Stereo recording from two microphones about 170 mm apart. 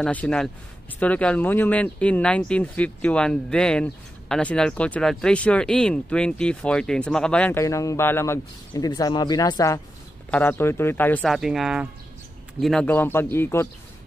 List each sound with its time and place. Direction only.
0.0 s speech: 5° left (ahead or behind)
7.6 s speech: 20° left (ahead or behind)
11.2 s speech: centre (ahead or behind)
12.8 s speech: 10° left (ahead or behind)